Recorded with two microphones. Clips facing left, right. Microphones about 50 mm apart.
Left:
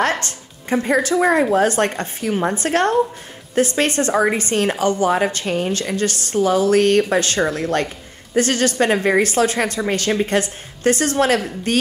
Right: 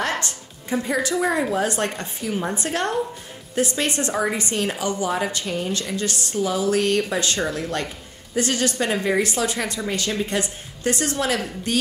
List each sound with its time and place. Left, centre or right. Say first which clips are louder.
0.0 s music: left 5 dB; left
0.8 s a woman's voice: left 6 dB; left